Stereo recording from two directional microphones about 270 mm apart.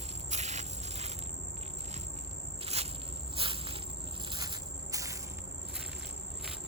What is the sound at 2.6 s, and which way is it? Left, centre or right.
Insect, right.